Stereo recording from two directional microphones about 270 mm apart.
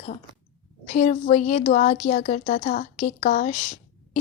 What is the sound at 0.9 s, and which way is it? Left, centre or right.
Speech, left.